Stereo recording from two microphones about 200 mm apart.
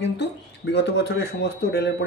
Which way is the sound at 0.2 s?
60° left (ahead or behind).